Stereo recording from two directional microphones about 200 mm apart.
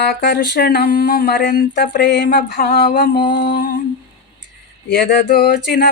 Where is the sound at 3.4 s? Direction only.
45° left (ahead or behind).